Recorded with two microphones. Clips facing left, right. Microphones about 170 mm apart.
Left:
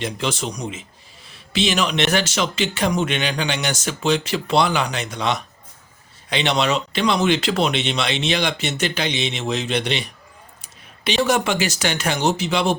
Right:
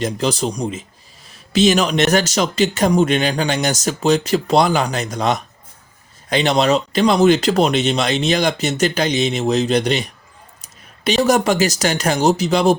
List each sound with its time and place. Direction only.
0.0 s speech: 40° right (ahead or behind)